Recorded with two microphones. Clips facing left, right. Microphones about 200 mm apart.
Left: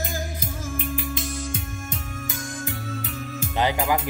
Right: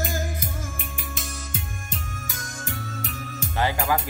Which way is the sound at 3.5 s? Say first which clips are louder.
Left 1 dB; 20° left (ahead or behind).